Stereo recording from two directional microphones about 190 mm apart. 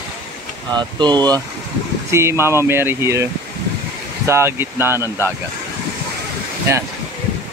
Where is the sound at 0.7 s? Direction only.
20° right (ahead or behind).